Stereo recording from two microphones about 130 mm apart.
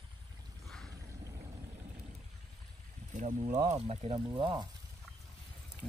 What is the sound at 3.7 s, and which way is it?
Speech, 55° right (ahead or behind).